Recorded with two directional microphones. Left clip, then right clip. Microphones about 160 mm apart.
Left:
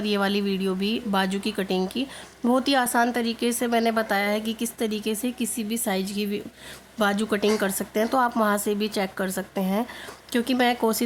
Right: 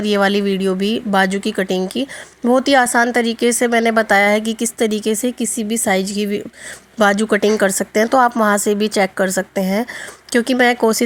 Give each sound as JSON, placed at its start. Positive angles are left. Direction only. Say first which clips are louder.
{"t": 0.0, "sound": "speech", "louder": "right 9 dB", "side_deg": -30}